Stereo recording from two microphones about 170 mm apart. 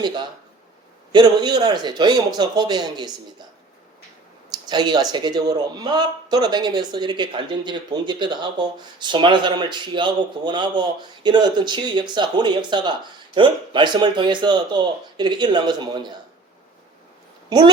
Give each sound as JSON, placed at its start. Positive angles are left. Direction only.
{"t": 1.1, "sound": "speech", "side_deg": -25}
{"t": 4.5, "sound": "speech", "side_deg": -25}